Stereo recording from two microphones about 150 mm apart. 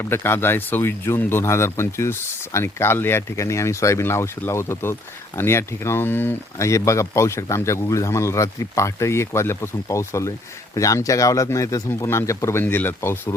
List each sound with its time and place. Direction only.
0.0 s speech: 15° left (ahead or behind)